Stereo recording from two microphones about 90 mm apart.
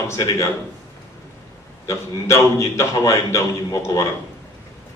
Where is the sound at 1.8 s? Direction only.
35° left (ahead or behind).